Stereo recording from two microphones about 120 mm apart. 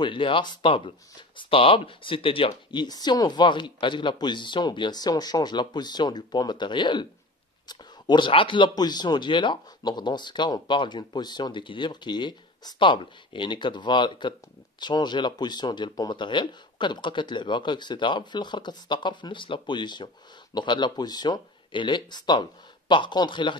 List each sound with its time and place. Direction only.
0.0 s speech: 45° left (ahead or behind)